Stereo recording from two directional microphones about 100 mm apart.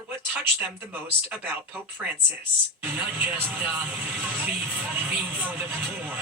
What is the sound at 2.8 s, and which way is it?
Speech, 15° right (ahead or behind).